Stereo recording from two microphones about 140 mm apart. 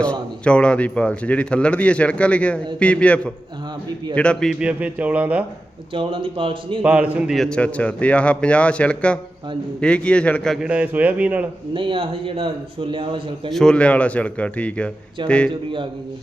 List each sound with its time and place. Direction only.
0.0 s a man's voice: 10° left (ahead or behind)
4.6 s speech: 10° right (ahead or behind)
5.9 s speech: 40° right (ahead or behind)
6.8 s a man's voice: 10° right (ahead or behind)
10.7 s speech: 10° right (ahead or behind)
11.7 s speech: 40° right (ahead or behind)
13.5 s a man's voice: 5° left (ahead or behind)